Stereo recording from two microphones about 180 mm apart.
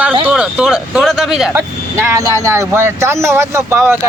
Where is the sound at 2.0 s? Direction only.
15° right (ahead or behind).